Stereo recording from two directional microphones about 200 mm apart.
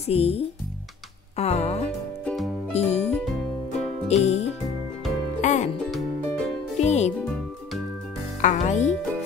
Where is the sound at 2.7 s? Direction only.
30° left (ahead or behind).